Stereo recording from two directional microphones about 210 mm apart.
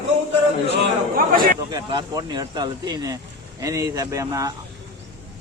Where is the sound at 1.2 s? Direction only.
40° right (ahead or behind).